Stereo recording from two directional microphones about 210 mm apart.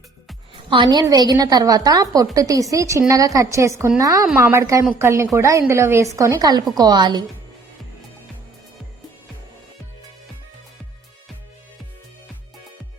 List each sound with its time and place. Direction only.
0.7 s a woman's voice: 20° right (ahead or behind)